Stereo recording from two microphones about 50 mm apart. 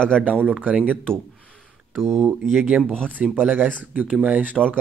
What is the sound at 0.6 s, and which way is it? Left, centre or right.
Speech, right.